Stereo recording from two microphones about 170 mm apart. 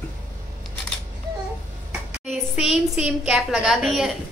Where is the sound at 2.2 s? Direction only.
Centre (ahead or behind).